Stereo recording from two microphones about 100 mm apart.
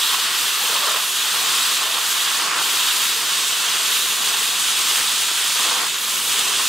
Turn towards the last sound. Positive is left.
turn(degrees=0)  # may be behind; listen again after turning